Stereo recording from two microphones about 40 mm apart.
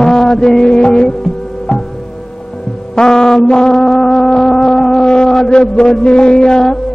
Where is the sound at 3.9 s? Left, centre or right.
Centre.